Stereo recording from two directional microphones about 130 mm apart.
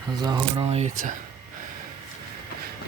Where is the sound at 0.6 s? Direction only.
55° right (ahead or behind).